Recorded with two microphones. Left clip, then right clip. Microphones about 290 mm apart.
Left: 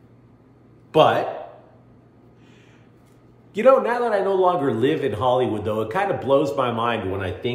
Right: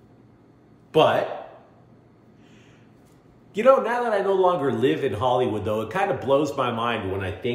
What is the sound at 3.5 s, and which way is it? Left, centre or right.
A man's voice, centre.